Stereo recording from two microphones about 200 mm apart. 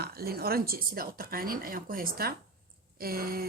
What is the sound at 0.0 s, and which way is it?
A woman's voice, 50° right (ahead or behind).